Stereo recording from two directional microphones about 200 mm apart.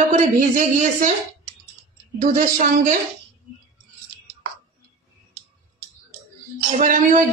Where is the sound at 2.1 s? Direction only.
45° right (ahead or behind).